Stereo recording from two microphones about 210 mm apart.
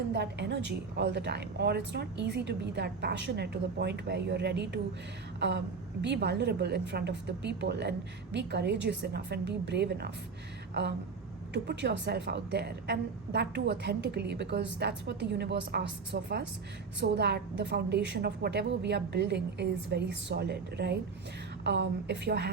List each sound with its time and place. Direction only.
0.1 s a woman's voice: 55° right (ahead or behind)
11.5 s a woman's voice: 55° right (ahead or behind)